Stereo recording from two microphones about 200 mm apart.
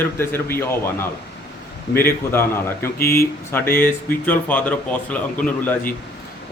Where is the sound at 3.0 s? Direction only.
50° left (ahead or behind).